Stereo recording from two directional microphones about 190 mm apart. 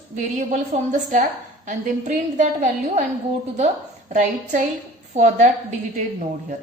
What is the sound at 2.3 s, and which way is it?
Speech, 40° right (ahead or behind).